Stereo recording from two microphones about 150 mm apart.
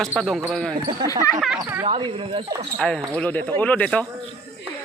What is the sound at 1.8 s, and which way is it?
Speech, 40° right (ahead or behind).